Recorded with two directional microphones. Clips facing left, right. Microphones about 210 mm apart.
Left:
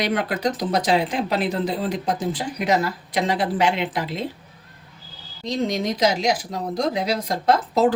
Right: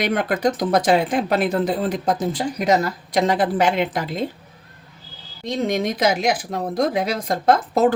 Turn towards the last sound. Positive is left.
turn(degrees=-50)  # may be behind; listen again after turning